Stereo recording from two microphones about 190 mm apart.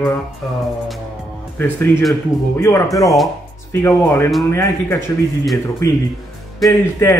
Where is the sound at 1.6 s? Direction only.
10° left (ahead or behind).